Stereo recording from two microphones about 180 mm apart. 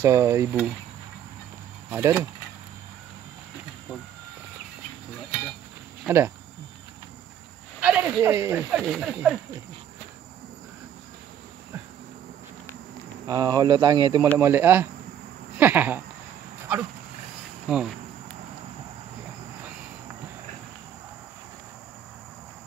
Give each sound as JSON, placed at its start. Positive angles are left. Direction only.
{"t": 0.0, "sound": "speech", "side_deg": -15}
{"t": 1.9, "sound": "speech", "side_deg": -15}
{"t": 6.0, "sound": "speech", "side_deg": -15}
{"t": 7.8, "sound": "speech", "side_deg": -5}
{"t": 8.8, "sound": "speech", "side_deg": 0}
{"t": 13.3, "sound": "speech", "side_deg": -20}
{"t": 16.5, "sound": "a sound", "side_deg": -15}
{"t": 17.7, "sound": "speech", "side_deg": -5}